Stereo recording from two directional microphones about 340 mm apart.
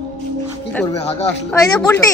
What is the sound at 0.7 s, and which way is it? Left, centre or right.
Speech, centre.